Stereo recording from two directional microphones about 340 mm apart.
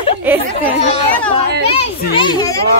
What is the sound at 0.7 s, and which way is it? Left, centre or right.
Speech, centre.